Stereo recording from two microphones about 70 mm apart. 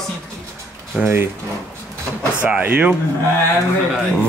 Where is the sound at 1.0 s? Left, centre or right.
Right.